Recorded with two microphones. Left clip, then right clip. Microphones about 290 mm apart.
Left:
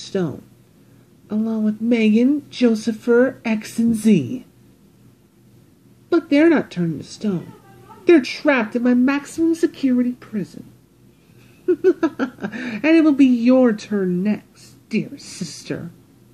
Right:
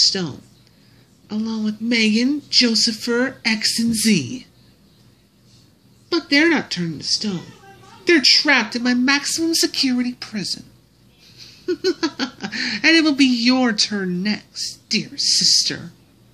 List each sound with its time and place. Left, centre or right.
0.1 s a woman's voice: centre
6.0 s a woman's voice: centre
11.6 s speech: centre
15.1 s speech: left